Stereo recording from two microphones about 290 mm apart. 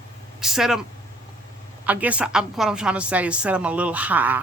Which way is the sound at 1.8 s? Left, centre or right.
Centre.